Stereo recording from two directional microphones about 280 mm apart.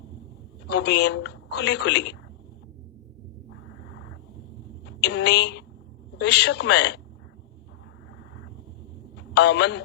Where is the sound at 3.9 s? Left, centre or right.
Left.